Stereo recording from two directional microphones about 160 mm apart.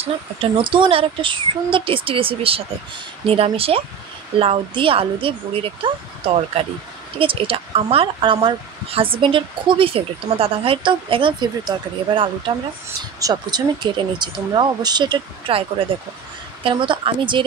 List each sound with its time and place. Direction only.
0.0 s speech: 35° right (ahead or behind)
16.6 s speech: 30° right (ahead or behind)